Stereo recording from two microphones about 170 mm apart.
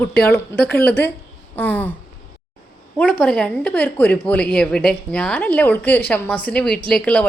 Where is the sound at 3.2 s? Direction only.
5° left (ahead or behind).